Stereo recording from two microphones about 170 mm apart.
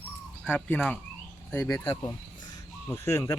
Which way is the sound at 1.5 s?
15° left (ahead or behind).